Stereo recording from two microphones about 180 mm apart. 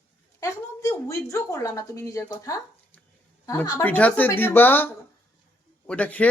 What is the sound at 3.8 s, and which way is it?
A woman's voice, 10° left (ahead or behind).